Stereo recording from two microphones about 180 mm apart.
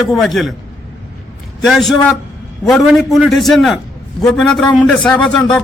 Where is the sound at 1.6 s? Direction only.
Centre (ahead or behind).